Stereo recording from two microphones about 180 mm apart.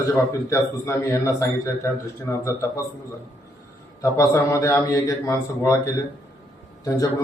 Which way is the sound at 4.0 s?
15° left (ahead or behind).